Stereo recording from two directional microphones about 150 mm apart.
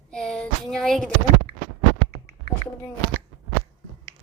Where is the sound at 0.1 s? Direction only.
5° left (ahead or behind).